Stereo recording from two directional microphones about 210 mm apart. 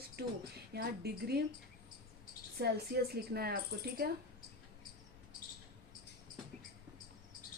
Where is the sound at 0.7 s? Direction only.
50° right (ahead or behind).